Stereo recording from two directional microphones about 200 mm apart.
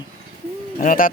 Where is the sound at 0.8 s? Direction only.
45° left (ahead or behind).